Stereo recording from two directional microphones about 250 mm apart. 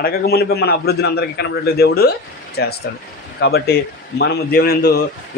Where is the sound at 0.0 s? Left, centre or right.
Left.